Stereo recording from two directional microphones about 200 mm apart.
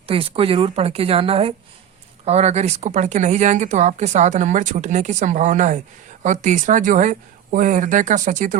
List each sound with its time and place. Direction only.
0.1 s a woman's voice: 30° right (ahead or behind)